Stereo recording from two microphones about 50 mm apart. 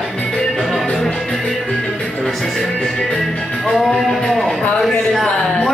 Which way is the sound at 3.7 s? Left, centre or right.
Centre.